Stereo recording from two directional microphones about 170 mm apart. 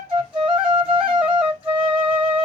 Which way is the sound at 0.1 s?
30° right (ahead or behind).